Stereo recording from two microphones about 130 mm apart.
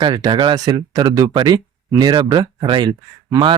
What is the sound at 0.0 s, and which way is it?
Speech, 35° right (ahead or behind).